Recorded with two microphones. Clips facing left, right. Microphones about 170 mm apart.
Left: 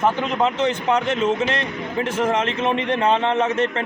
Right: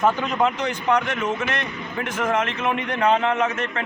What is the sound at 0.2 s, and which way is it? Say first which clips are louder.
A man's voice: left 2 dB; 20° left (ahead or behind).